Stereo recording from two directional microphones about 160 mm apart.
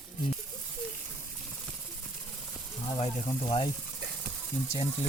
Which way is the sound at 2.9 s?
40° left (ahead or behind).